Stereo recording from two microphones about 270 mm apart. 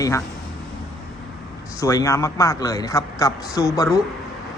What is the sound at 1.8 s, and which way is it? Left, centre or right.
A man's voice, centre.